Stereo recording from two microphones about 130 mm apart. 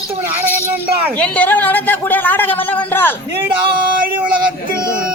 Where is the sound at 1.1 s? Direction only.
10° left (ahead or behind).